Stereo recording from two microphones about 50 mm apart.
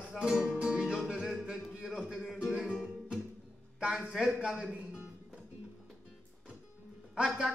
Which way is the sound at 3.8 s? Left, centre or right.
Right.